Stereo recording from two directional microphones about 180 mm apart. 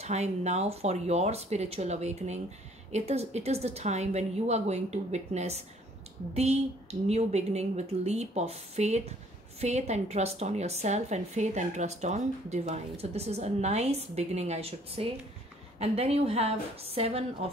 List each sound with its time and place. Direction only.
0.0 s a woman's voice: 40° right (ahead or behind)